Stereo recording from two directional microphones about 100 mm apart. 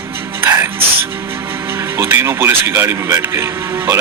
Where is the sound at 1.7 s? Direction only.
25° right (ahead or behind).